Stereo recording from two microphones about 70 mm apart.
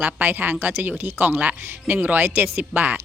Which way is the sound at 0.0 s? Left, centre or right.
Right.